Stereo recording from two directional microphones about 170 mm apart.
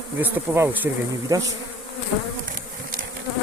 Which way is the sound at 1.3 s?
20° right (ahead or behind).